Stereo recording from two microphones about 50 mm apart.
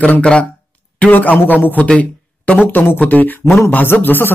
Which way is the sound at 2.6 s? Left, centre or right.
Left.